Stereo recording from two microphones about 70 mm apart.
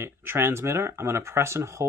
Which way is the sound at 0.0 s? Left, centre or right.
Right.